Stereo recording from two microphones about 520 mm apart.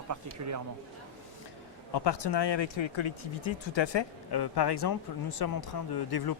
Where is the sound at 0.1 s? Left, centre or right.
Right.